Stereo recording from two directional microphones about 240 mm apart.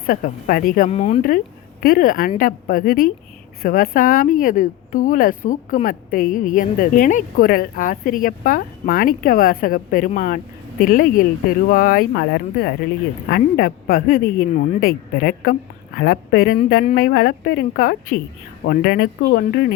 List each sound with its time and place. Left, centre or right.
0.1 s speech: left